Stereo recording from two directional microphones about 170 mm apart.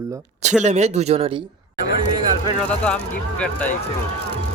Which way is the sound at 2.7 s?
5° left (ahead or behind).